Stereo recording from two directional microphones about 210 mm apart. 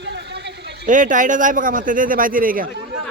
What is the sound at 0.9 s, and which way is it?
A man's voice, 40° right (ahead or behind).